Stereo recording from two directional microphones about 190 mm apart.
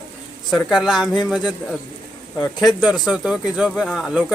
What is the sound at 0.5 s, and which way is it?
Speech, centre (ahead or behind).